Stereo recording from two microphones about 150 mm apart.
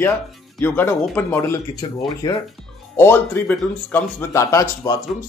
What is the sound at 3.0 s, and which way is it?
Speech, 15° left (ahead or behind).